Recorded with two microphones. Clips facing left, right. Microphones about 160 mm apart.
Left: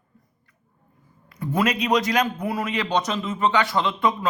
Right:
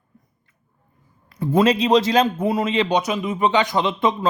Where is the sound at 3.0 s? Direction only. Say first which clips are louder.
Right 3 dB; 10° right (ahead or behind).